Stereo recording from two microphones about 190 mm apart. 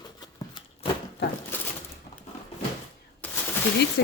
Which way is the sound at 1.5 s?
10° left (ahead or behind).